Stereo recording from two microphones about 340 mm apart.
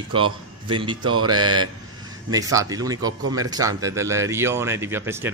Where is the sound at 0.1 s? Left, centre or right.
Centre.